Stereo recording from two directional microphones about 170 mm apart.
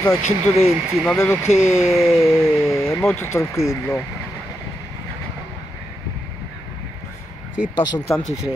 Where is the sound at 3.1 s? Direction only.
15° left (ahead or behind).